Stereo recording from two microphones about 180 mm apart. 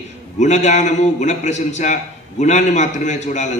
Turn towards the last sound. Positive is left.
turn(degrees=40)  # may be behind; listen again after turning